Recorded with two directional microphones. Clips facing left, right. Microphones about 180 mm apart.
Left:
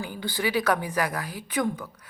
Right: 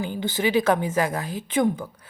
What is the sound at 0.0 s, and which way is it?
A woman's voice, 20° right (ahead or behind).